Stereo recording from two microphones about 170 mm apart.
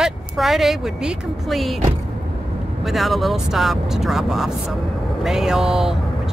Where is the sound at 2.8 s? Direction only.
Centre (ahead or behind).